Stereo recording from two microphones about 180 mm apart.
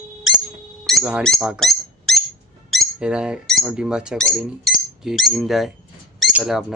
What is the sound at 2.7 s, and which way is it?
Speech, centre (ahead or behind).